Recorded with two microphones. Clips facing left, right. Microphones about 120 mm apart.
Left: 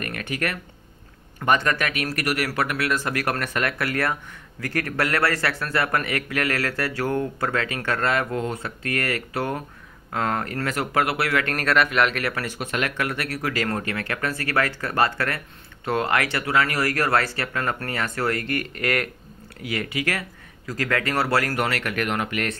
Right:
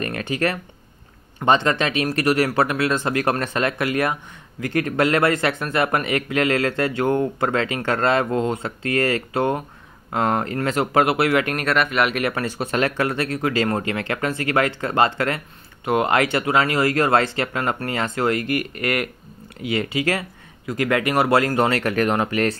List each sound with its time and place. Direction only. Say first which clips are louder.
0.0 s speech: right 5 dB; 30° right (ahead or behind)
11.4 s speech: right 1 dB; 5° right (ahead or behind)
12.2 s speech: right 4 dB; 25° right (ahead or behind); by 19.0 s 5° right (ahead or behind)
19.6 s speech: right 5 dB; 25° right (ahead or behind)